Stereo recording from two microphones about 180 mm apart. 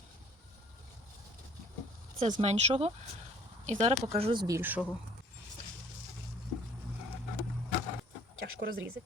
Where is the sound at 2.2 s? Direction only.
35° right (ahead or behind).